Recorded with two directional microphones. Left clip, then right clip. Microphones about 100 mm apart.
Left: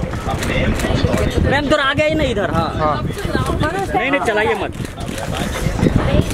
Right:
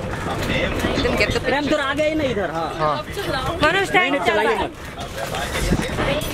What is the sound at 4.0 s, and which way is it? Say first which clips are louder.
Speech: left 2 dB; 60° left (ahead or behind).